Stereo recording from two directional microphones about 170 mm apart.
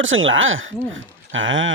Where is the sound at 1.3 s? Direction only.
90° right.